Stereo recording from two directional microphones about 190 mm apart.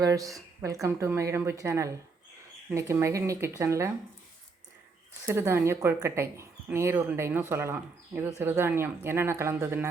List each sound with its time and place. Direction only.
0.0 s speech: 20° right (ahead or behind)
5.2 s speech: 15° right (ahead or behind)